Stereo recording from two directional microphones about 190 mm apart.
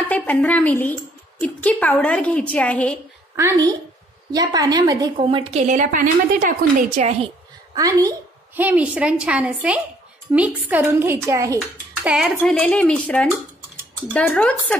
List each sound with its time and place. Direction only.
0.1 s a woman's voice: 10° left (ahead or behind)
3.3 s a woman's voice: 15° right (ahead or behind); by 7.1 s 40° right (ahead or behind)
7.7 s a woman's voice: 20° right (ahead or behind)
8.5 s a woman's voice: 10° right (ahead or behind); by 14.8 s 10° left (ahead or behind)